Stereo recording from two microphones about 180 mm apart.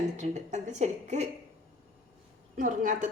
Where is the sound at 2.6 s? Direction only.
45° right (ahead or behind).